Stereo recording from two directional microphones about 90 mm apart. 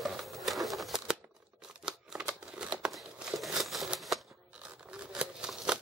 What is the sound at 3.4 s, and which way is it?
Crumpling, centre (ahead or behind).